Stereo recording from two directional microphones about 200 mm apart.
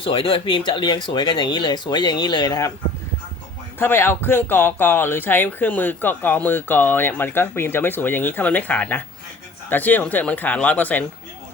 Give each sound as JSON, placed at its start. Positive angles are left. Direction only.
{"t": 0.0, "sound": "speech", "side_deg": 25}
{"t": 3.8, "sound": "speech", "side_deg": 10}